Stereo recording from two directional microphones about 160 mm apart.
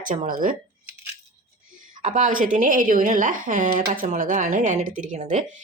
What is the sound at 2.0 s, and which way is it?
Speech, 50° right (ahead or behind).